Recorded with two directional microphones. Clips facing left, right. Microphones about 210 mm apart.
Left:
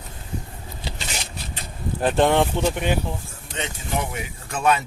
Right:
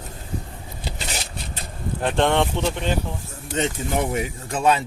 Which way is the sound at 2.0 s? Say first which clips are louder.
Left 2 dB; 5° left (ahead or behind).